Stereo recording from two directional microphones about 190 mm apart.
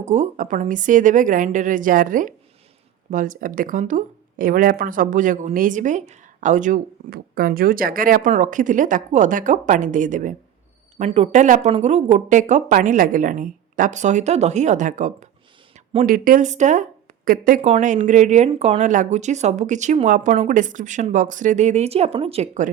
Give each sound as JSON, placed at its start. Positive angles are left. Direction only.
{"t": 0.0, "sound": "speech", "side_deg": -35}